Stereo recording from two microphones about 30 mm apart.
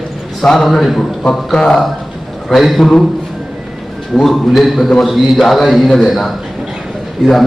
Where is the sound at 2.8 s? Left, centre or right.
Centre.